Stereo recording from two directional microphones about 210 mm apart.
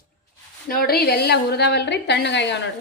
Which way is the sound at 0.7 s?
45° left (ahead or behind).